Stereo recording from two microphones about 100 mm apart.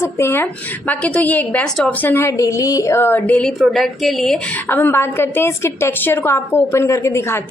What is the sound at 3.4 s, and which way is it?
A woman's voice, centre (ahead or behind).